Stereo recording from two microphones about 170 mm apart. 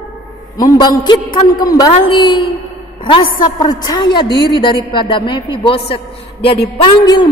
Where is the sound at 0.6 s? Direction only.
25° left (ahead or behind).